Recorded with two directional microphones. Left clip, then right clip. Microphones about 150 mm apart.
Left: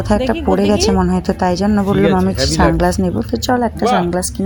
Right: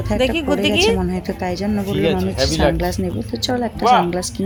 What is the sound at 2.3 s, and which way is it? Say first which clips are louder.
Speech: left 3 dB; 5° left (ahead or behind).